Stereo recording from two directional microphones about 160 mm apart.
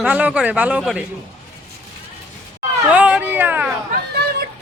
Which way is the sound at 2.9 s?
10° right (ahead or behind).